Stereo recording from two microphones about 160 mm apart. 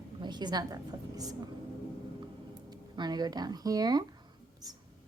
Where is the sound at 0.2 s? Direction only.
25° right (ahead or behind).